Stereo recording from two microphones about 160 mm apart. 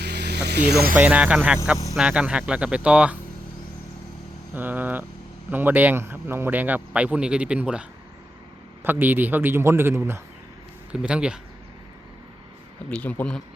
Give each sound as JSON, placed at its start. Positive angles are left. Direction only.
{"t": 0.0, "sound": "vehicle", "side_deg": -90}
{"t": 0.9, "sound": "speech", "side_deg": -10}
{"t": 4.5, "sound": "speech", "side_deg": -10}
{"t": 12.9, "sound": "speech", "side_deg": 10}